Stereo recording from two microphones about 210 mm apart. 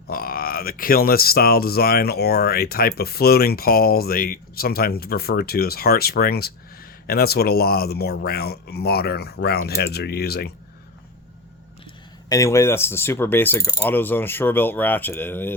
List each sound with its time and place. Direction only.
0.1 s speech: 45° left (ahead or behind)
12.3 s speech: 15° left (ahead or behind)